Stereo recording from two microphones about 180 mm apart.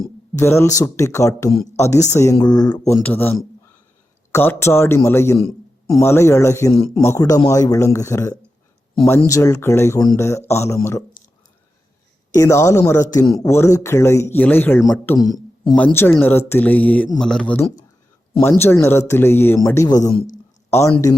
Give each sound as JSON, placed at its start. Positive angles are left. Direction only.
{"t": 0.3, "sound": "speech", "side_deg": 15}
{"t": 12.3, "sound": "a man's voice", "side_deg": 15}
{"t": 20.1, "sound": "a man's voice", "side_deg": 45}
{"t": 20.7, "sound": "speech", "side_deg": 15}